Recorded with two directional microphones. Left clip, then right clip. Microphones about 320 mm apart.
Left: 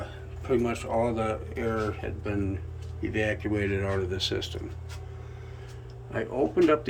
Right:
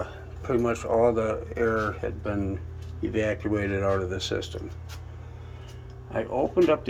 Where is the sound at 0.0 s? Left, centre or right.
Centre.